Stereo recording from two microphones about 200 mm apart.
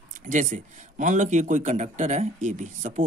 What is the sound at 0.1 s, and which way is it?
Speech, 40° right (ahead or behind).